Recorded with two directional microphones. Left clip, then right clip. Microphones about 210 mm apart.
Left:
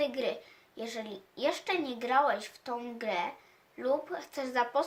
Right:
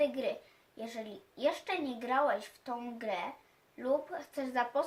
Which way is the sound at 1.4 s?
50° left (ahead or behind).